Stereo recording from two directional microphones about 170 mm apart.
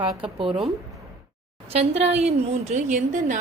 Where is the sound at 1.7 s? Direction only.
40° right (ahead or behind).